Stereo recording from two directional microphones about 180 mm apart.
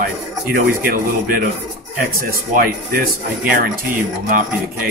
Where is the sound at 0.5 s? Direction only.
55° right (ahead or behind).